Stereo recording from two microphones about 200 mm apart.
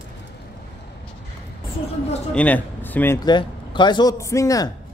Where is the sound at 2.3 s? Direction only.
10° left (ahead or behind).